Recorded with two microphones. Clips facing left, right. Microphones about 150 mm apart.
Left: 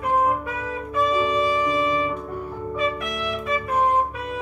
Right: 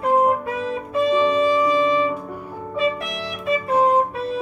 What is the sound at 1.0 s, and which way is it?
Music, 30° right (ahead or behind).